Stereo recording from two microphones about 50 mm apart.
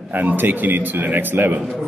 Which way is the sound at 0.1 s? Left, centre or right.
Right.